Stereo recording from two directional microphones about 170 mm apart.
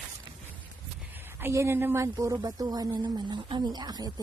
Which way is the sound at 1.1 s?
10° right (ahead or behind).